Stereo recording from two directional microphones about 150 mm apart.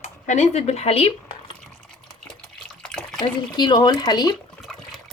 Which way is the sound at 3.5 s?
30° left (ahead or behind).